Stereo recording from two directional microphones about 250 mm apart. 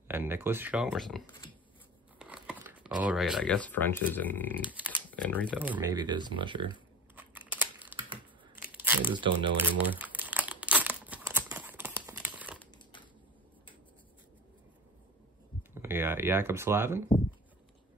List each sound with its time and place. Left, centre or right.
0.1 s speech: centre
4.6 s dog: centre
5.1 s speech: centre
5.5 s speech: centre
7.2 s scissors: centre
8.7 s crumpling: centre
9.1 s speech: centre
9.8 s crumpling: centre
15.7 s speech: centre